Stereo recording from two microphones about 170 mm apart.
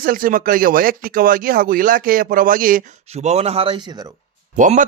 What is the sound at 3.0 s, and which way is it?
A man's voice, 40° right (ahead or behind).